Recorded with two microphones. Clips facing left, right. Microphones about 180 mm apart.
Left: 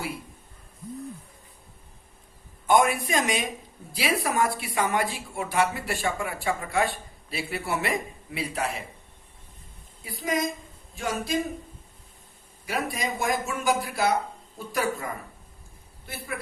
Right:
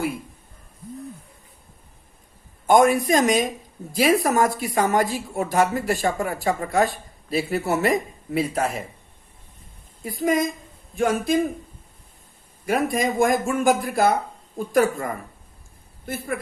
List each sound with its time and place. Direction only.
2.6 s a woman's voice: 40° right (ahead or behind)
10.0 s speech: 45° right (ahead or behind)
12.6 s speech: 50° right (ahead or behind)